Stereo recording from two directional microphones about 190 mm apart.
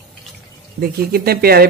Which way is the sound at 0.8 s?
55° right (ahead or behind).